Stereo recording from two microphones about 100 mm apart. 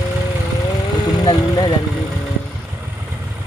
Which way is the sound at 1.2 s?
50° left (ahead or behind).